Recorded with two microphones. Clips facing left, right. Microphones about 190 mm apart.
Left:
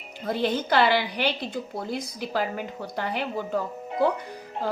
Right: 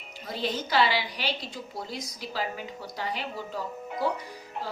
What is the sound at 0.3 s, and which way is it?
A woman's voice, 55° left (ahead or behind).